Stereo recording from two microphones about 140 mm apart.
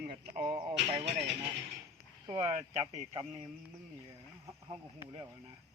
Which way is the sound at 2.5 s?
60° right (ahead or behind).